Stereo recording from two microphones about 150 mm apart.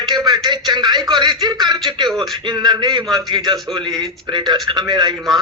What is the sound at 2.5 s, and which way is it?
A man's voice, 30° right (ahead or behind).